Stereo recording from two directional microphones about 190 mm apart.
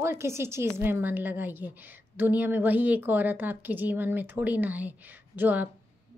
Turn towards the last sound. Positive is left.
turn(degrees=-10)  # may be behind; listen again after turning